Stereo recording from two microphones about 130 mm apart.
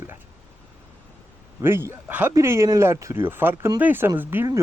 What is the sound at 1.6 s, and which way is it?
Speech, 20° right (ahead or behind).